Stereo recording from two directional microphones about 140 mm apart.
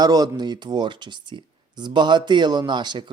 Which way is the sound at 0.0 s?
30° right (ahead or behind).